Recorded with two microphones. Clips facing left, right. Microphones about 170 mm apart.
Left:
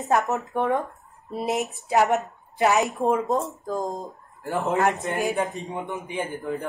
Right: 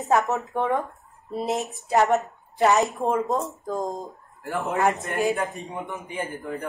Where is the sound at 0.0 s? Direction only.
Centre (ahead or behind).